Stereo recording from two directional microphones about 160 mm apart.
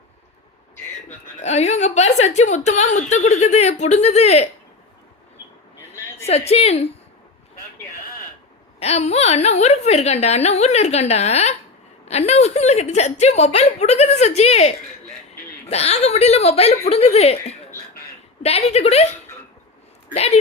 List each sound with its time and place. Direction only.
1.0 s a woman's voice: 45° left (ahead or behind)
6.2 s a woman's voice: 40° left (ahead or behind)
8.8 s a woman's voice: 40° left (ahead or behind)
15.7 s a woman's voice: 40° left (ahead or behind)
20.1 s a woman's voice: 40° left (ahead or behind)